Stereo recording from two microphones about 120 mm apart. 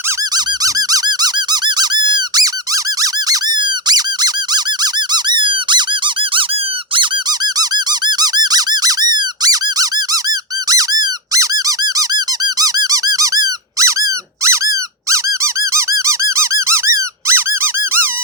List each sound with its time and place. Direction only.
0.3 s squeak: 30° right (ahead or behind)
7.6 s squeak: 35° right (ahead or behind); by 18.1 s 20° right (ahead or behind)